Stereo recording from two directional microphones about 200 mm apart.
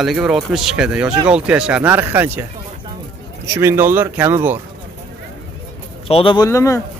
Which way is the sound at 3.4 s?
15° right (ahead or behind).